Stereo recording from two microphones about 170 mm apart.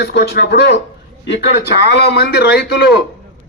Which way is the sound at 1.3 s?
90° left.